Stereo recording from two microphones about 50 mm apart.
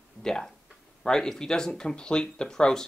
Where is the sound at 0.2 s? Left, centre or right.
Centre.